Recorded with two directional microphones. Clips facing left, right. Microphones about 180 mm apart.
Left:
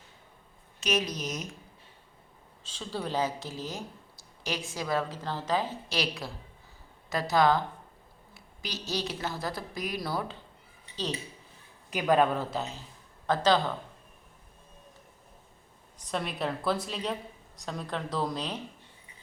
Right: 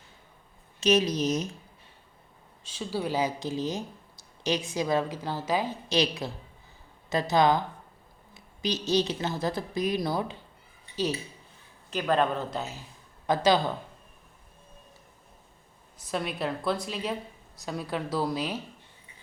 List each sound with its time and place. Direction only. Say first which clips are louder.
0.8 s a woman's voice: right 7 dB; 30° right (ahead or behind)
2.7 s a woman's voice: right 3 dB; 10° right (ahead or behind)
11.9 s speech: left 1 dB; 10° left (ahead or behind)
13.2 s speech: right 2 dB; 10° right (ahead or behind)
16.0 s a woman's voice: right 1 dB; centre (ahead or behind)